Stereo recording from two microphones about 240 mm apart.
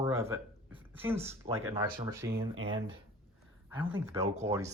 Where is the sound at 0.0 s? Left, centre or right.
Centre.